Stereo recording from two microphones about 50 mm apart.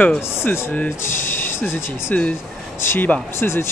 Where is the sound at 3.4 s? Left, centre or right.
Left.